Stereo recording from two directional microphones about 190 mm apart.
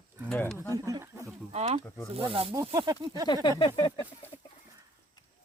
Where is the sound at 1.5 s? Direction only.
35° right (ahead or behind).